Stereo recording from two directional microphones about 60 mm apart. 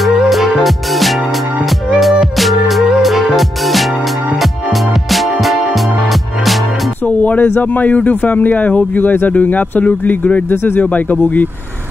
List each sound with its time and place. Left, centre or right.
0.3 s music: centre
5.1 s music: centre
7.1 s speech: left
10.5 s speech: left
10.8 s speech: left